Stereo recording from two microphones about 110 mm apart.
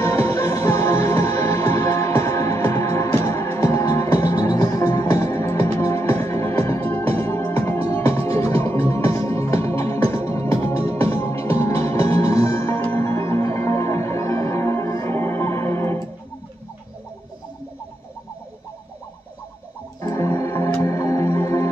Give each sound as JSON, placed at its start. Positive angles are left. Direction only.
{"t": 0.0, "sound": "music", "side_deg": 25}
{"t": 20.0, "sound": "music", "side_deg": 30}